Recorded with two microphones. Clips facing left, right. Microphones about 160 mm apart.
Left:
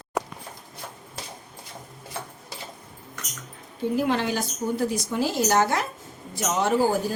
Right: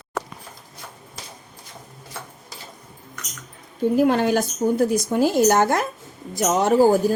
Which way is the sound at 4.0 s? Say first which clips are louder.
Right 7 dB; 50° right (ahead or behind).